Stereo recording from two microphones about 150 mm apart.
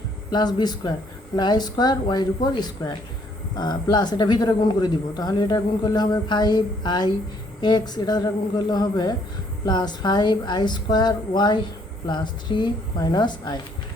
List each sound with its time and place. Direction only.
0.3 s speech: 30° left (ahead or behind)